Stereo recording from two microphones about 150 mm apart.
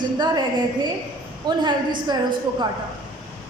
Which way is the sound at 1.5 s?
30° right (ahead or behind).